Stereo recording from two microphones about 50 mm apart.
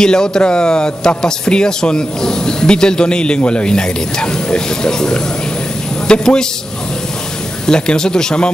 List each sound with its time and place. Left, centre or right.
0.0 s a man's voice: centre
7.6 s a man's voice: centre